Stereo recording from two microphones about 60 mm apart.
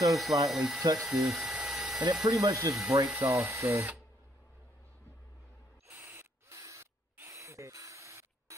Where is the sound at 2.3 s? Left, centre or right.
Right.